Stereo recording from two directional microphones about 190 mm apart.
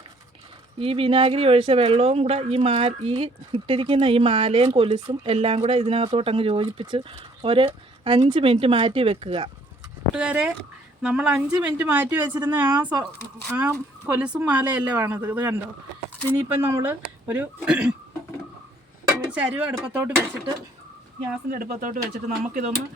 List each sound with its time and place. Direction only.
0.8 s speech: 30° right (ahead or behind)
10.2 s speech: 5° right (ahead or behind)
12.8 s speech: 20° right (ahead or behind); by 17.8 s 5° right (ahead or behind)
19.0 s speech: 10° right (ahead or behind)
21.5 s speech: 45° right (ahead or behind)